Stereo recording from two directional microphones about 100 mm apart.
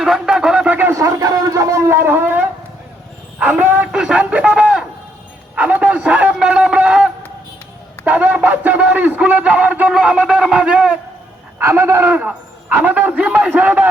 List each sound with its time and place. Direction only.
0.0 s a sound: 5° right (ahead or behind)
0.9 s a man's voice: 35° right (ahead or behind); by 11.0 s 10° right (ahead or behind)
11.6 s speech: 25° right (ahead or behind)